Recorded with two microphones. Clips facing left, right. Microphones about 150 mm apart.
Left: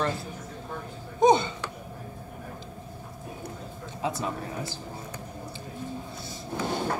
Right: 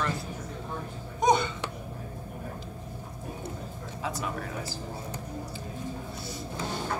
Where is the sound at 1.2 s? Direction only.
25° left (ahead or behind).